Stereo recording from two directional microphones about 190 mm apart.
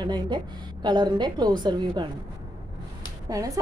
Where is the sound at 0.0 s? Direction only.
20° right (ahead or behind).